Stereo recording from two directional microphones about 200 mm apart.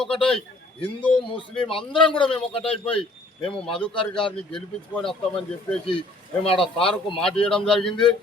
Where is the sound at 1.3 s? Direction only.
25° left (ahead or behind).